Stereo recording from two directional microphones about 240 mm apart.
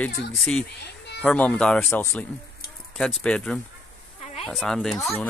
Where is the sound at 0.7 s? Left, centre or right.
Left.